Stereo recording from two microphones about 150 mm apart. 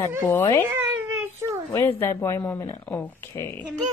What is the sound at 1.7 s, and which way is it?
Speech, 15° left (ahead or behind).